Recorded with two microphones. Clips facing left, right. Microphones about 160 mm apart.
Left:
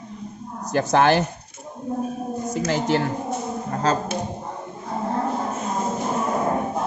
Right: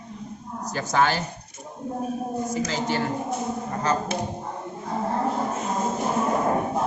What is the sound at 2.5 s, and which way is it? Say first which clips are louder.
Speech: left 7 dB; 65° left (ahead or behind).